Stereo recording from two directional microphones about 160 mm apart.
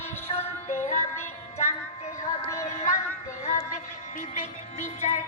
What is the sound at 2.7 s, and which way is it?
Music, 45° left (ahead or behind).